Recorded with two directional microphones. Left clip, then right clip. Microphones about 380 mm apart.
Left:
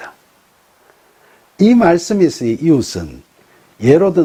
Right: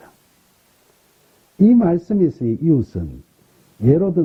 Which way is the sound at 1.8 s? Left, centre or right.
Centre.